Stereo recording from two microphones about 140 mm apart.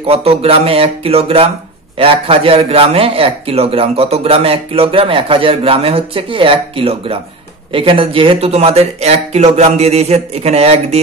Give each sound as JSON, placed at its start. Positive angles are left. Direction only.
{"t": 0.0, "sound": "a man's voice", "side_deg": -45}